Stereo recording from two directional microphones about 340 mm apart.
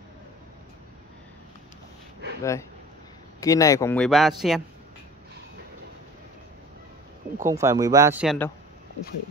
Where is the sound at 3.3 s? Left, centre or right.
Centre.